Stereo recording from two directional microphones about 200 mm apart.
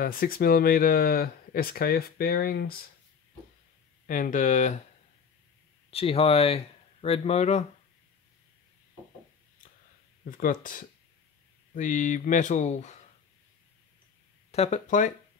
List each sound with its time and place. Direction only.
0.0 s speech: 45° left (ahead or behind)
4.1 s speech: 40° left (ahead or behind)
5.9 s speech: 30° left (ahead or behind)
10.3 s speech: 45° left (ahead or behind)
14.5 s speech: 35° left (ahead or behind)